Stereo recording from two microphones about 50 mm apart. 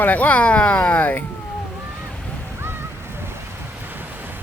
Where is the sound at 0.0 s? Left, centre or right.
Left.